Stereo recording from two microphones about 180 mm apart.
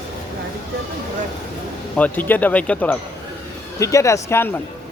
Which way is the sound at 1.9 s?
10° left (ahead or behind).